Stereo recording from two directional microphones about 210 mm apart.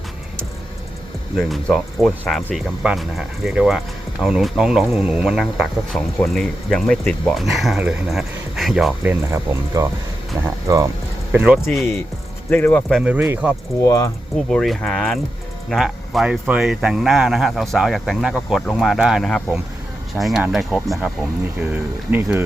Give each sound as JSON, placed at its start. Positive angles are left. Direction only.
{"t": 1.4, "sound": "speech", "side_deg": 0}
{"t": 12.5, "sound": "speech", "side_deg": 10}
{"t": 13.1, "sound": "speech", "side_deg": -10}
{"t": 13.8, "sound": "speech", "side_deg": 15}
{"t": 14.5, "sound": "speech", "side_deg": 0}